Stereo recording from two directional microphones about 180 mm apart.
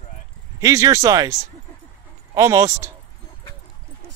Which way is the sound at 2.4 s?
15° right (ahead or behind).